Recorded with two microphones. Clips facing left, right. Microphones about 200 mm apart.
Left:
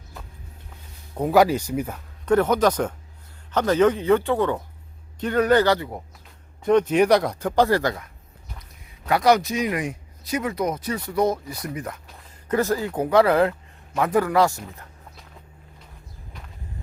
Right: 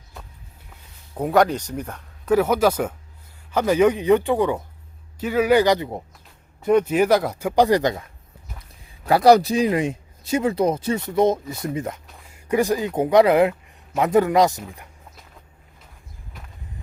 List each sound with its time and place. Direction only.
1.1 s speech: centre (ahead or behind)
2.2 s speech: 5° right (ahead or behind)
9.0 s speech: 35° right (ahead or behind)
12.3 s speech: 15° right (ahead or behind)